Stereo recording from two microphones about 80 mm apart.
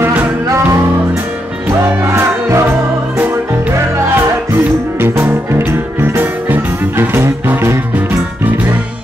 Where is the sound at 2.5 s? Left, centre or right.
Right.